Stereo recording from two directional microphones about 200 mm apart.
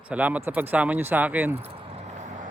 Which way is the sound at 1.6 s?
30° right (ahead or behind).